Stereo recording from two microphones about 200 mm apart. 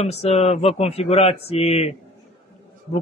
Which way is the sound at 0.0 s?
30° left (ahead or behind).